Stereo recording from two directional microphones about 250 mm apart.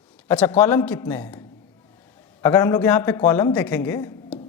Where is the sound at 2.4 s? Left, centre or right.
Centre.